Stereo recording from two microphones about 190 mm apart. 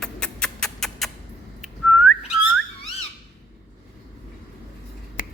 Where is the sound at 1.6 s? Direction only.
5° left (ahead or behind).